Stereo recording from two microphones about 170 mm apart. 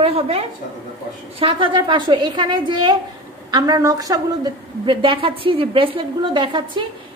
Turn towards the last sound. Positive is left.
turn(degrees=-25)  # may be behind; listen again after turning